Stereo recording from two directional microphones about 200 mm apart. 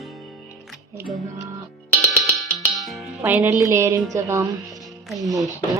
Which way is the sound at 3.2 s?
10° right (ahead or behind).